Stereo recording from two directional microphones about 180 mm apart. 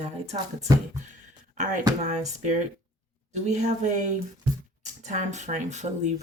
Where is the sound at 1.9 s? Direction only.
40° right (ahead or behind).